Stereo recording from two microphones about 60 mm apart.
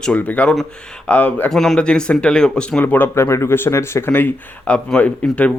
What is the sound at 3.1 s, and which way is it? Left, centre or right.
Speech, left.